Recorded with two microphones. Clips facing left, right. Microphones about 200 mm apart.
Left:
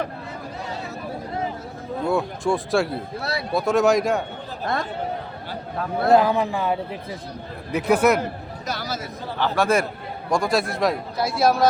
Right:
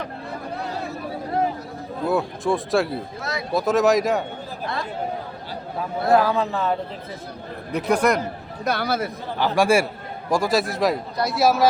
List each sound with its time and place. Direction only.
2.0 s a man's voice: centre (ahead or behind)
4.7 s speech: 45° left (ahead or behind)
6.1 s a man's voice: 20° left (ahead or behind)
8.6 s speech: 60° right (ahead or behind)
9.4 s a man's voice: 10° right (ahead or behind)